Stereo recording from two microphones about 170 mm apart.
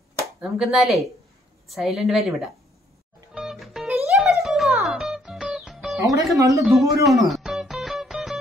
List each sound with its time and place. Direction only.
0.2 s speech: centre (ahead or behind)
3.3 s music: centre (ahead or behind)
5.9 s speech: 20° right (ahead or behind)
6.6 s music: centre (ahead or behind)